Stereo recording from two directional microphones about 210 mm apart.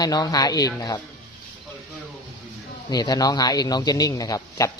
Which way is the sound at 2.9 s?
20° left (ahead or behind).